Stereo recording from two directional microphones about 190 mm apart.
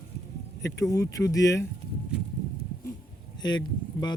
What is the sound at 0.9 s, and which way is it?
Speech, 15° left (ahead or behind).